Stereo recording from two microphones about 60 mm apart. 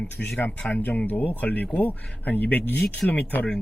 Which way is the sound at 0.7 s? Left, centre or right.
Left.